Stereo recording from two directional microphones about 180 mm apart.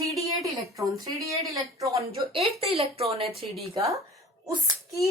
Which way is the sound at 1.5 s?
20° right (ahead or behind).